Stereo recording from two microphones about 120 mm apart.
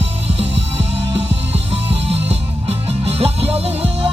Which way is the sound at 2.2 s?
55° right (ahead or behind).